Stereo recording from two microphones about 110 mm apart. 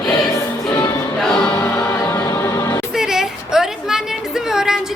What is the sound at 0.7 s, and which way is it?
Music, 25° left (ahead or behind).